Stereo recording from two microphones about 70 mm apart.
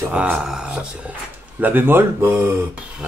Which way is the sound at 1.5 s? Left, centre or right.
Right.